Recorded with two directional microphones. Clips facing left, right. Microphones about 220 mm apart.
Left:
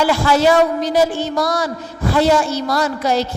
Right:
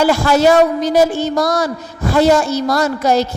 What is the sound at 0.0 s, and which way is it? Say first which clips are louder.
A man's voice: right 2 dB; 45° right (ahead or behind).